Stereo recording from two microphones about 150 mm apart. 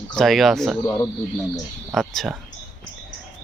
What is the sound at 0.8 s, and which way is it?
Speech, 15° left (ahead or behind).